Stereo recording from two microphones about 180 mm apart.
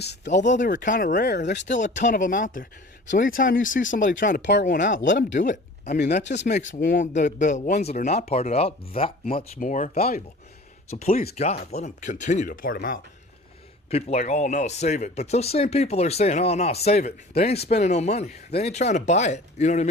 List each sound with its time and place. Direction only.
0.3 s speech: 40° left (ahead or behind); by 1.6 s 75° left (ahead or behind)
1.6 s speech: 40° left (ahead or behind)
6.2 s speech: 75° left (ahead or behind)
6.7 s speech: 50° left (ahead or behind)
10.9 s speech: 40° left (ahead or behind)
13.9 s speech: 40° left (ahead or behind)